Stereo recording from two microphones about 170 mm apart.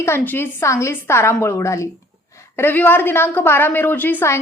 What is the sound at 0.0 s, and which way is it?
A woman's voice, 15° left (ahead or behind).